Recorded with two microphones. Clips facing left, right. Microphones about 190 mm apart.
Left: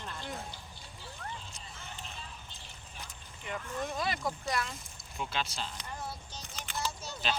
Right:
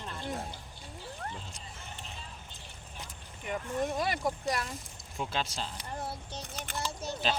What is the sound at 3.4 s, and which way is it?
Speech, 35° right (ahead or behind).